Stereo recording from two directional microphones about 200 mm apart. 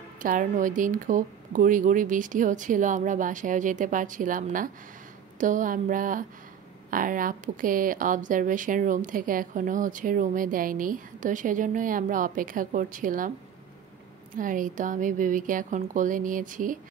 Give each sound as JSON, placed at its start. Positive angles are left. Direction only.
{"t": 0.2, "sound": "speech", "side_deg": -45}
{"t": 14.3, "sound": "speech", "side_deg": -40}